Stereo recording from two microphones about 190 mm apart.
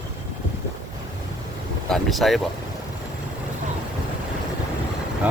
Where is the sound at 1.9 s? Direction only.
Centre (ahead or behind).